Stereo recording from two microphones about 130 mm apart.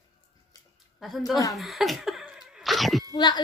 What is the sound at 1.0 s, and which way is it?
Speech, centre (ahead or behind).